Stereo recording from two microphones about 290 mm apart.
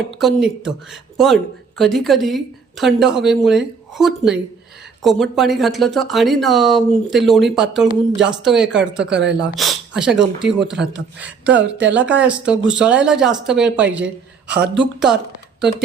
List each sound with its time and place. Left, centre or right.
0.1 s speech: centre